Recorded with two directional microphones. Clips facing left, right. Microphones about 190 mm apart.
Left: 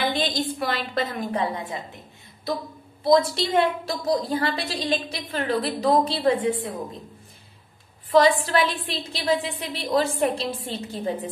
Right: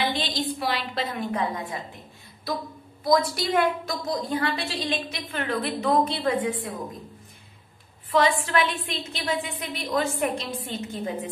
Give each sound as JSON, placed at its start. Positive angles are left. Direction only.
{"t": 0.0, "sound": "a woman's voice", "side_deg": 45}
{"t": 1.3, "sound": "a woman's voice", "side_deg": 30}
{"t": 3.0, "sound": "a woman's voice", "side_deg": 25}
{"t": 8.1, "sound": "a woman's voice", "side_deg": 35}